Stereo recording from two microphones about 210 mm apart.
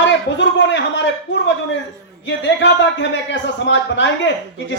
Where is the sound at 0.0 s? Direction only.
60° left (ahead or behind).